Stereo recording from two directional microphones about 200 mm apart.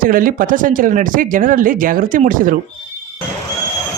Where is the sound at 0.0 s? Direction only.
45° right (ahead or behind).